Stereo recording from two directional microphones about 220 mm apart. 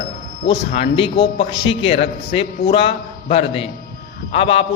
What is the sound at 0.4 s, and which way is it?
A man's voice, 25° left (ahead or behind).